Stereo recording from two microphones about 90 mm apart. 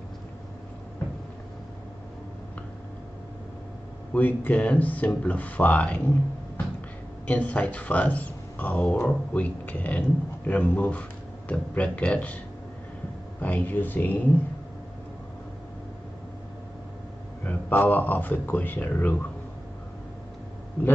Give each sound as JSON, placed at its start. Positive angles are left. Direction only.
{"t": 4.1, "sound": "a man's voice", "side_deg": 20}
{"t": 7.2, "sound": "a man's voice", "side_deg": 15}
{"t": 13.4, "sound": "speech", "side_deg": 20}
{"t": 17.5, "sound": "speech", "side_deg": 20}